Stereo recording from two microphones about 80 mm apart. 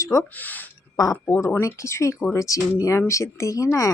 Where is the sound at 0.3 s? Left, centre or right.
Left.